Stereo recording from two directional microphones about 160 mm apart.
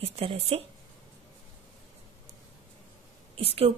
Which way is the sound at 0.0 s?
40° right (ahead or behind).